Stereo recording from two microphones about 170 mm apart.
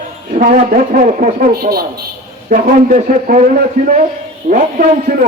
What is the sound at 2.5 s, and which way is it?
A man's voice, 50° right (ahead or behind).